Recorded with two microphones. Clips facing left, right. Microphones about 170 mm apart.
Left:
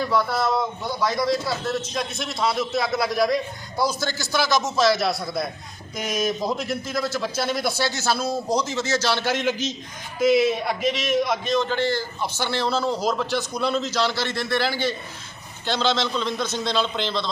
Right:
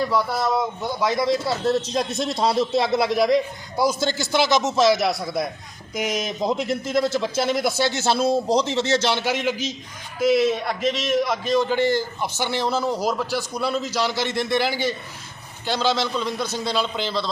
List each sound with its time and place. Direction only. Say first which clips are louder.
0.1 s a man's voice: even; 15° right (ahead or behind)
10.2 s a man's voice: even; centre (ahead or behind)